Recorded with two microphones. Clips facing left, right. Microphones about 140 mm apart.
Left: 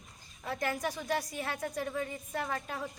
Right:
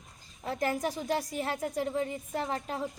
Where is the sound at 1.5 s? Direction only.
25° right (ahead or behind).